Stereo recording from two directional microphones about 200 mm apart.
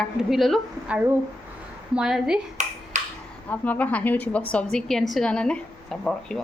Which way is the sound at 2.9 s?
35° right (ahead or behind).